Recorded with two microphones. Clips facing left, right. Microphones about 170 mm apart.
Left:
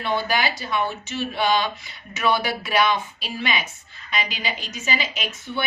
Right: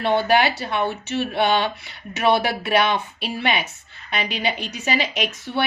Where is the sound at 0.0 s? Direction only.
65° right (ahead or behind).